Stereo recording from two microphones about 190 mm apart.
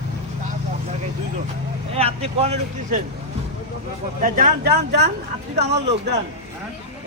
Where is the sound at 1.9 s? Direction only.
30° right (ahead or behind).